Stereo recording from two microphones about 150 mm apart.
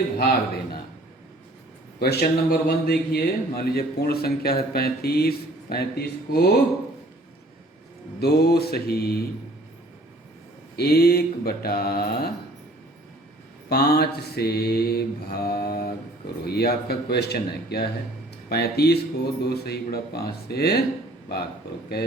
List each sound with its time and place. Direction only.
0.2 s a man's voice: 90° left
2.0 s a man's voice: 90° left
8.2 s a man's voice: 90° left
10.8 s a man's voice: 90° left
13.7 s a man's voice: 90° left